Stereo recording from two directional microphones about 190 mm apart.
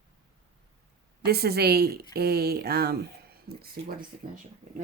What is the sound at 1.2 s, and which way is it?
Speech, 55° right (ahead or behind).